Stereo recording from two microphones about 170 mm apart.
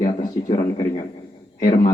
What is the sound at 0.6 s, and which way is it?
Speech, 25° left (ahead or behind).